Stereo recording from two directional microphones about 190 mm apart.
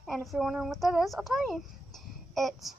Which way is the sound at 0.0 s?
Centre (ahead or behind).